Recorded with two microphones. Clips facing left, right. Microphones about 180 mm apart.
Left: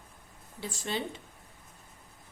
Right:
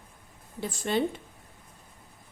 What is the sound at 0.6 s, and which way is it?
Speech, 55° right (ahead or behind).